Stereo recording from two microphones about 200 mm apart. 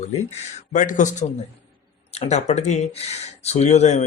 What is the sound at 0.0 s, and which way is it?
Speech, 35° left (ahead or behind).